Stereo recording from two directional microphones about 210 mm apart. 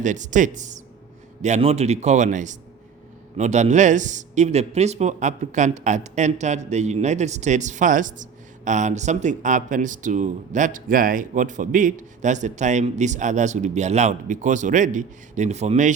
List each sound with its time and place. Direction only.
0.0 s a man's voice: 35° right (ahead or behind)